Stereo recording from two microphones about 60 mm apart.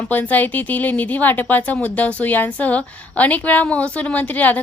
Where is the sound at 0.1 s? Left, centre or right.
Left.